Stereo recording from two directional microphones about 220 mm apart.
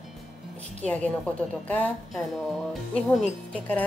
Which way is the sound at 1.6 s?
5° left (ahead or behind).